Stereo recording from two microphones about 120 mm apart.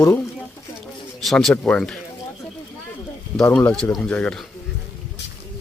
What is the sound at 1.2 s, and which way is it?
Speech, centre (ahead or behind).